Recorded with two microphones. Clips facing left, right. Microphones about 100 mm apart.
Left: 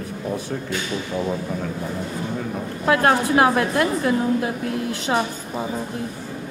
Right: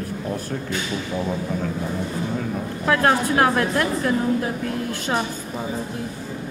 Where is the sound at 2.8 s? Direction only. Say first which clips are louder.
Left 1 dB; 15° left (ahead or behind).